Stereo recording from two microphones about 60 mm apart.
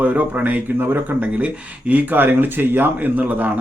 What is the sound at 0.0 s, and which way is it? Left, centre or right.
Speech, right.